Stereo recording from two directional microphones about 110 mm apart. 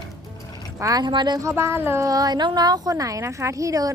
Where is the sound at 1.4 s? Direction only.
25° right (ahead or behind).